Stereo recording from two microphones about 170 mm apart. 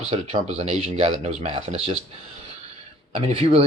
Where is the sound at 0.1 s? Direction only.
40° right (ahead or behind).